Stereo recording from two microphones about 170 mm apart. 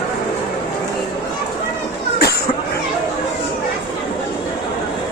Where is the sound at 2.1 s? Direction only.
70° left (ahead or behind).